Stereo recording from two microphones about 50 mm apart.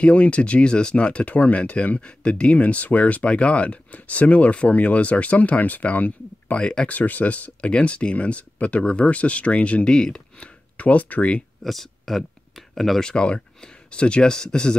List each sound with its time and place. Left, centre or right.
0.0 s speech: left
6.9 s speech: left; by 10.5 s centre
10.8 s speech: left
11.6 s a sound: centre
13.0 s speech: centre